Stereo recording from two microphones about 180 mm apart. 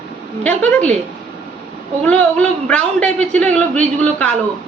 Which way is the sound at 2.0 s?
5° left (ahead or behind).